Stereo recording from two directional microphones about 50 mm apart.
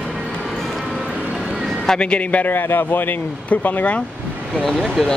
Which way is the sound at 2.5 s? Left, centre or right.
Left.